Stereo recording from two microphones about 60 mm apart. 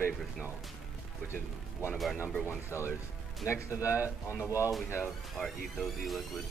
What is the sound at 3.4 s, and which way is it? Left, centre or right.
Speech, left.